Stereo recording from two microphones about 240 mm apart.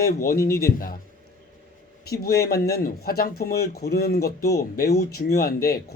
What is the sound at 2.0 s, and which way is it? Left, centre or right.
Speech, left.